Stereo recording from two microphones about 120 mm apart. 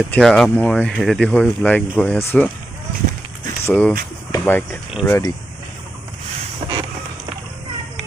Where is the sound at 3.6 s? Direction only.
15° left (ahead or behind).